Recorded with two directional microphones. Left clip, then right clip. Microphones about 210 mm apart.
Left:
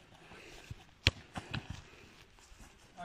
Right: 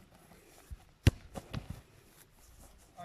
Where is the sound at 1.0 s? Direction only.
50° right (ahead or behind).